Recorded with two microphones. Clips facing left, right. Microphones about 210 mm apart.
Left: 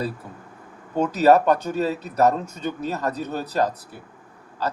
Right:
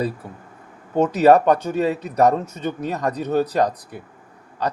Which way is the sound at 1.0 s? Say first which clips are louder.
Right 2 dB; 10° right (ahead or behind).